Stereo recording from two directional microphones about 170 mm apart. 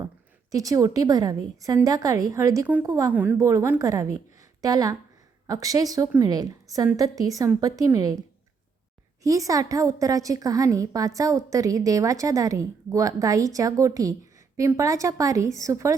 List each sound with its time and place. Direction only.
0.5 s a woman's voice: 20° right (ahead or behind)
9.2 s a woman's voice: 20° right (ahead or behind)